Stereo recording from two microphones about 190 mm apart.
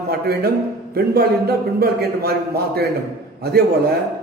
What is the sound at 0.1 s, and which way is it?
A man's voice, 55° right (ahead or behind).